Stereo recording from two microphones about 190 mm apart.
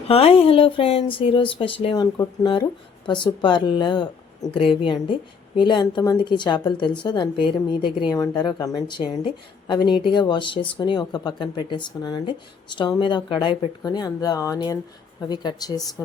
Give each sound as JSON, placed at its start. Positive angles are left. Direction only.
{"t": 0.1, "sound": "a woman's voice", "side_deg": 30}